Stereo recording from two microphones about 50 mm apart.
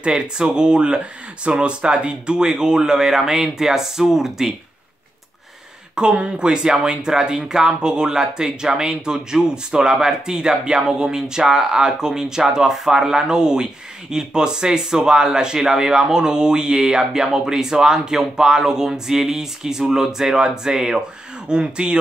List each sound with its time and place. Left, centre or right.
0.0 s speech: centre
5.9 s speech: centre